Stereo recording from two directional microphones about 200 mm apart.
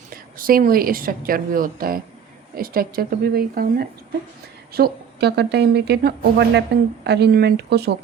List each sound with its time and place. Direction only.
0.3 s a woman's voice: 45° right (ahead or behind)